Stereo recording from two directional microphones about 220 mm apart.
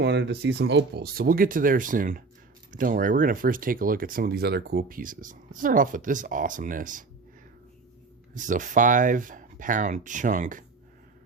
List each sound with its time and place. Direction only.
0.0 s speech: 50° right (ahead or behind)
8.4 s speech: 35° right (ahead or behind)